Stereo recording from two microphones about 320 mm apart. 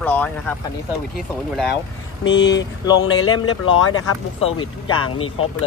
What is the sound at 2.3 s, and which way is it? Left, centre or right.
Speech, left.